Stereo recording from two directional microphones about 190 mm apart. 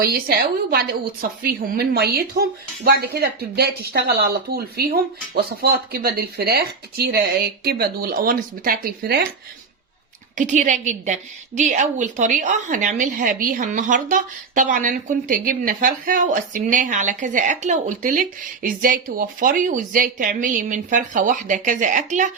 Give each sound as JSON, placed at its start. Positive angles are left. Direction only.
{"t": 0.0, "sound": "a woman's voice", "side_deg": -50}
{"t": 10.3, "sound": "a woman's voice", "side_deg": -40}